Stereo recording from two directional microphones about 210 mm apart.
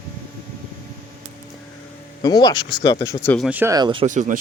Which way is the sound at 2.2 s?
20° left (ahead or behind).